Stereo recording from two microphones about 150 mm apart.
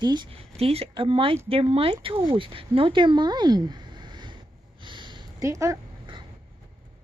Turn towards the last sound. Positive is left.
turn(degrees=-25)  # may be behind; listen again after turning